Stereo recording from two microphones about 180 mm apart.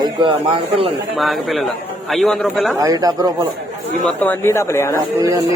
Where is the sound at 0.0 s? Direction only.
25° right (ahead or behind).